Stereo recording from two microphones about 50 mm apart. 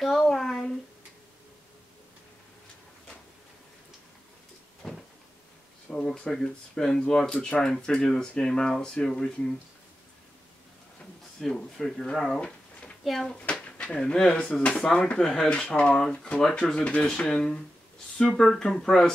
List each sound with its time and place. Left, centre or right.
0.0 s a sound: centre
4.8 s cupboard open or close: centre
5.9 s speech: centre
11.3 s speech: centre
13.4 s speech: left
15.5 s speech: left